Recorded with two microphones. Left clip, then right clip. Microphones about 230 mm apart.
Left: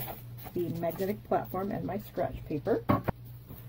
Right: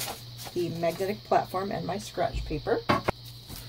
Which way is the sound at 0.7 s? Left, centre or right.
Centre.